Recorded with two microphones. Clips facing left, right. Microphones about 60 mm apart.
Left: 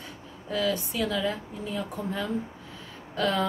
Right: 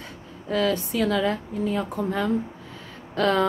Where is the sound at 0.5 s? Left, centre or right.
Right.